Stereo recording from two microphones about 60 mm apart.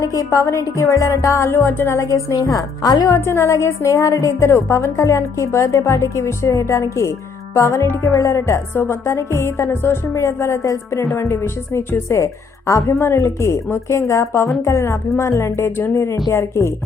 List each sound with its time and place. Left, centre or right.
0.0 s a woman's voice: left
0.3 s a woman's voice: left
2.0 s a woman's voice: left
3.2 s a woman's voice: left
4.4 s a woman's voice: left
12.9 s speech: left